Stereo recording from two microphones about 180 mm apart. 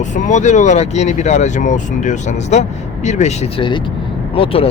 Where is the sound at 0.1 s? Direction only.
40° left (ahead or behind).